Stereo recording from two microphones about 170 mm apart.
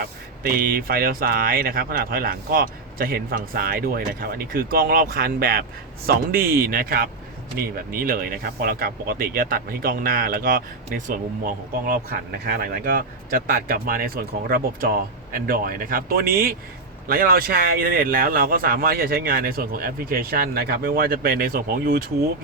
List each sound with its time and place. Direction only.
0.0 s speech: 60° right (ahead or behind)